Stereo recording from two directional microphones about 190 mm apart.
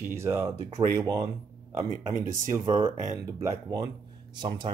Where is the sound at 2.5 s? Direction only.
15° right (ahead or behind).